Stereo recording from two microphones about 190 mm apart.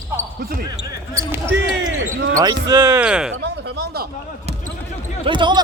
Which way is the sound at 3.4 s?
60° right (ahead or behind).